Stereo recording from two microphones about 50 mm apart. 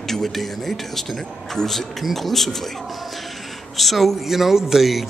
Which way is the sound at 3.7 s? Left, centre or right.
Centre.